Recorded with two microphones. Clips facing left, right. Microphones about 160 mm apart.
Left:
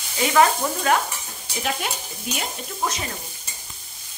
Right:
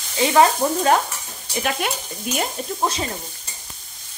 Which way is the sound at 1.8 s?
65° right (ahead or behind).